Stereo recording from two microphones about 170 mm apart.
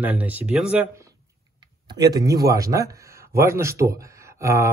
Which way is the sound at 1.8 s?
20° right (ahead or behind).